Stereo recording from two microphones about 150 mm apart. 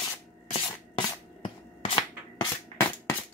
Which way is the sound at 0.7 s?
30° left (ahead or behind).